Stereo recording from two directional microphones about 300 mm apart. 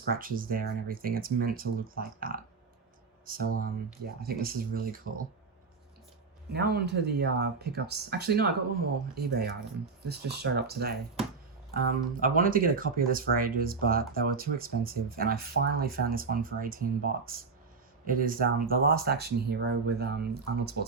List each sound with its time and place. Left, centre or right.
0.1 s speech: right
6.5 s speech: right
10.1 s speech: right